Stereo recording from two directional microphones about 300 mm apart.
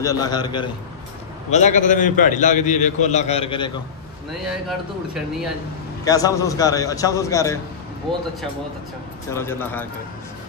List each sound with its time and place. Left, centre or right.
0.0 s a man's voice: centre
4.5 s speech: centre
6.0 s a man's voice: centre
9.3 s a man's voice: centre